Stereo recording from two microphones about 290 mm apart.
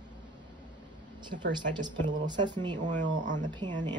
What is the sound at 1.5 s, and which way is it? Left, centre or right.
Speech, centre.